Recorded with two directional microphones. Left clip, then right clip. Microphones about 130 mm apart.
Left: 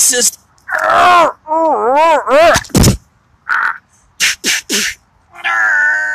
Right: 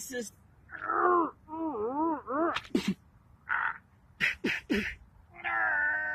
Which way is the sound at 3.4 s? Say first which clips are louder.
Left 17 dB; 20° left (ahead or behind).